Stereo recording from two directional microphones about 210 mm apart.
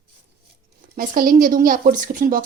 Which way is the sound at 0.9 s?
45° right (ahead or behind).